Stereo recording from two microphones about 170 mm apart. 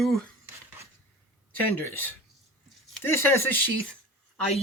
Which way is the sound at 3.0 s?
15° left (ahead or behind).